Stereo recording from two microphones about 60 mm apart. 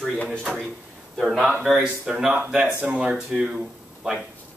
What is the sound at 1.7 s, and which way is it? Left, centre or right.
Speech, centre.